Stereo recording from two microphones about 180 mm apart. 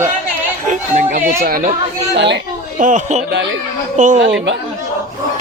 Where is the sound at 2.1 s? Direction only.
70° right (ahead or behind).